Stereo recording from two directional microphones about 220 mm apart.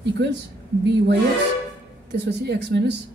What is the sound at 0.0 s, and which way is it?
Speech, 50° right (ahead or behind).